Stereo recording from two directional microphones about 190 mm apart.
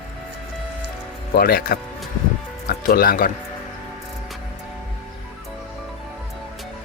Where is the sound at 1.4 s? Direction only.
55° left (ahead or behind).